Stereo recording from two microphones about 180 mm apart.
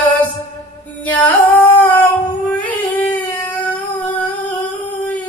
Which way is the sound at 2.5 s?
10° left (ahead or behind).